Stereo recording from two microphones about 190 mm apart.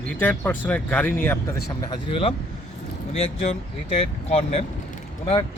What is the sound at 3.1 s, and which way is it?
Speech, 35° left (ahead or behind).